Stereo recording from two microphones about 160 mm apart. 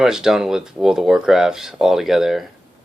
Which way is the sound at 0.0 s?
5° right (ahead or behind).